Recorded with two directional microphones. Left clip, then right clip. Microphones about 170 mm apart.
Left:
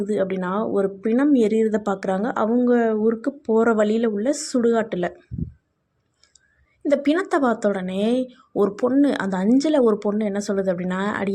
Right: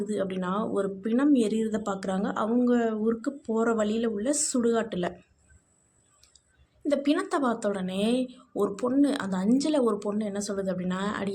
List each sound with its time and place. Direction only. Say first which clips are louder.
0.0 s speech: left 7 dB; 35° left (ahead or behind)
6.8 s speech: left 6 dB; 35° left (ahead or behind)